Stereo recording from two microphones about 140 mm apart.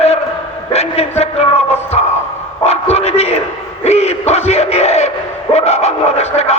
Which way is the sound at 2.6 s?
50° left (ahead or behind).